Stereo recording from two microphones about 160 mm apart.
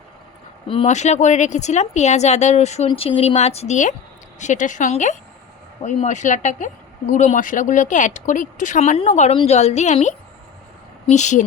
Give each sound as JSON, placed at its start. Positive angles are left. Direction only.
{"t": 0.7, "sound": "speech", "side_deg": 40}